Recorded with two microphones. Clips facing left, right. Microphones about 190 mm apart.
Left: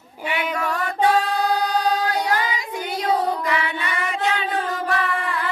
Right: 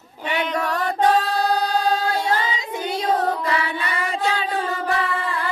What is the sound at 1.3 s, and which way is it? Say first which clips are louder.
Choir: even; 35° right (ahead or behind).